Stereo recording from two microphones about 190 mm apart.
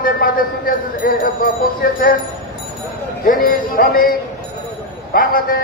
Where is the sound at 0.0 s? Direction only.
50° left (ahead or behind).